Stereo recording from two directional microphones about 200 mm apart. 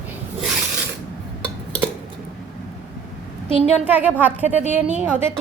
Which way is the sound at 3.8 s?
10° right (ahead or behind).